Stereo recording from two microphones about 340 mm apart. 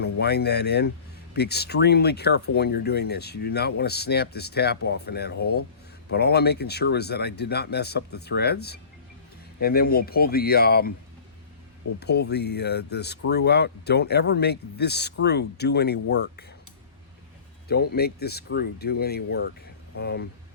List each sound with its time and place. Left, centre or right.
0.0 s speech: left
11.9 s speech: left
17.7 s speech: left